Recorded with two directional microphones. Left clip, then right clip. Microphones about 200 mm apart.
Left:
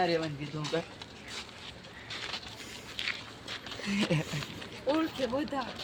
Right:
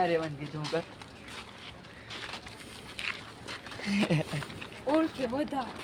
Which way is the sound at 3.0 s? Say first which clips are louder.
Left 1 dB; 40° right (ahead or behind).